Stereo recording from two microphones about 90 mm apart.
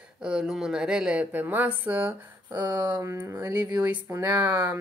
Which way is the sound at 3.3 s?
35° right (ahead or behind).